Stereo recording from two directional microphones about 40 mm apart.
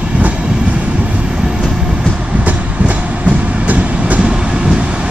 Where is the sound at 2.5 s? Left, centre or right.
Right.